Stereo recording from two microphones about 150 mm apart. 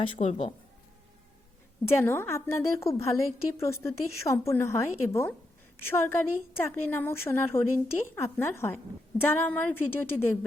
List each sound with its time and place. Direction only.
0.0 s speech: 40° left (ahead or behind)
1.9 s a woman's voice: 15° left (ahead or behind)